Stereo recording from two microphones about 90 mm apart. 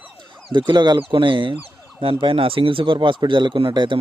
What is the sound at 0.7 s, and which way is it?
Speech, 60° right (ahead or behind).